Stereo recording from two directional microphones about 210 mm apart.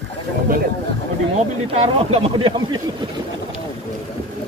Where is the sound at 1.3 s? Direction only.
30° right (ahead or behind).